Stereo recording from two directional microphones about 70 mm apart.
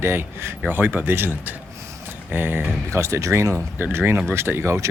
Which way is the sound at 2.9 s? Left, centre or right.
Right.